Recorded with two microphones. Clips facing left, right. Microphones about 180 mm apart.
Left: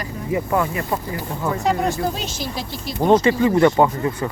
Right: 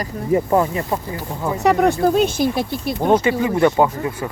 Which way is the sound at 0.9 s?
20° right (ahead or behind).